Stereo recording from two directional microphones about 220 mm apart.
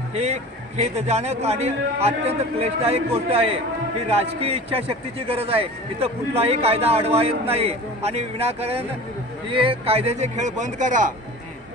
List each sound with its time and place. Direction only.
0.1 s a man's voice: 30° right (ahead or behind)